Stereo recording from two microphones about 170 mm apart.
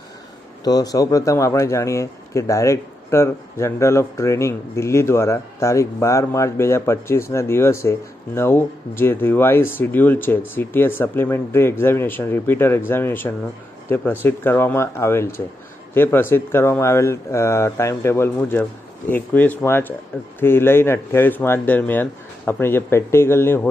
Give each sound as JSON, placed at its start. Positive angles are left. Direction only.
{"t": 0.6, "sound": "speech", "side_deg": 20}